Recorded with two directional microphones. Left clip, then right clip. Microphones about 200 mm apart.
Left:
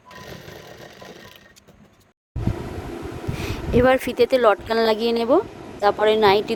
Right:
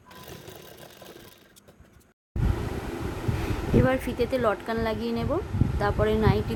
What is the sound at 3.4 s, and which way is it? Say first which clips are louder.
Speech: left 8 dB; 45° left (ahead or behind).